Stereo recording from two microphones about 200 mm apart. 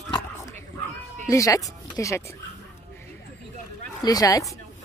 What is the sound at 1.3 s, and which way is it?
Speech, 15° left (ahead or behind).